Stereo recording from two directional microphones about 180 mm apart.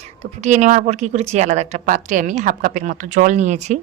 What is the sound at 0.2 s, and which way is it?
A woman's voice, 40° right (ahead or behind).